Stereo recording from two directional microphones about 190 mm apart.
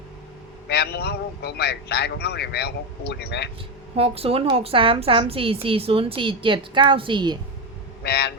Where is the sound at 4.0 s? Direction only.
30° right (ahead or behind).